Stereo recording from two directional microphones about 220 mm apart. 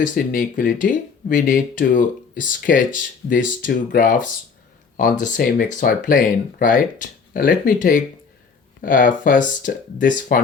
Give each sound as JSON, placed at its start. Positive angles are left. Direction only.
{"t": 0.0, "sound": "speech", "side_deg": 40}